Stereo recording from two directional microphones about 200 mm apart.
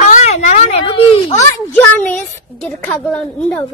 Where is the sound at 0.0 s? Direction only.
35° left (ahead or behind).